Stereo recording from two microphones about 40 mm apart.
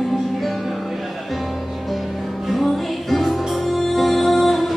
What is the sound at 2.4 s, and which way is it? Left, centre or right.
Music, centre.